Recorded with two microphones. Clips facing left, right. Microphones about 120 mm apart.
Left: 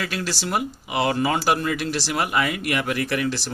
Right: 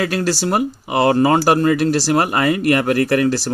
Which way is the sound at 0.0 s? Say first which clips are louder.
Right 9 dB; 45° right (ahead or behind).